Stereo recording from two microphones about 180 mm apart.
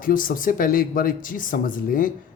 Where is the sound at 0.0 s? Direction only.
50° left (ahead or behind).